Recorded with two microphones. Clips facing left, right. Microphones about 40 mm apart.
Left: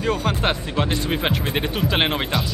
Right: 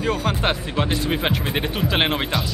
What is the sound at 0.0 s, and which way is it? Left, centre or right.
Speech, centre.